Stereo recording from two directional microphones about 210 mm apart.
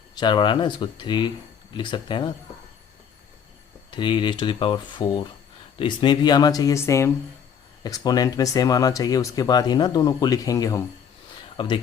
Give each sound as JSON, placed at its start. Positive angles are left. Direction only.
{"t": 0.2, "sound": "speech", "side_deg": 20}
{"t": 3.9, "sound": "speech", "side_deg": 20}